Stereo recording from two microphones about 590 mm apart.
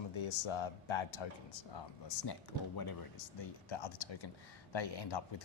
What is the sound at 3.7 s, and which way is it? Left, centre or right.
Speech, left.